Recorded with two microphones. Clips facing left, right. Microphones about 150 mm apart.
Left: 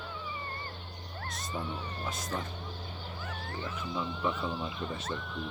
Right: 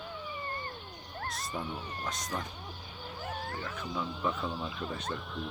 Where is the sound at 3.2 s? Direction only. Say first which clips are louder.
Right 5 dB; 40° right (ahead or behind).